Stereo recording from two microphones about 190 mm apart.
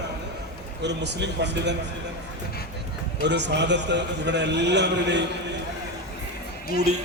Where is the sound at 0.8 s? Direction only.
65° right (ahead or behind).